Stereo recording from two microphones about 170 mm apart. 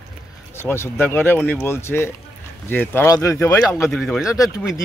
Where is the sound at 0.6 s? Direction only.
15° left (ahead or behind).